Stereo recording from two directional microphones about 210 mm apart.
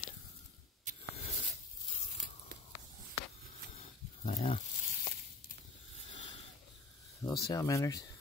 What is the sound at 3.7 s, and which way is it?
Wild animals, 30° left (ahead or behind).